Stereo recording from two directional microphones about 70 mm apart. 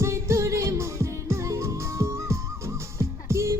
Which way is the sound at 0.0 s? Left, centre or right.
Right.